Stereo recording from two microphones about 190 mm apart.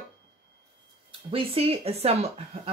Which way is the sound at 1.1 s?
30° right (ahead or behind).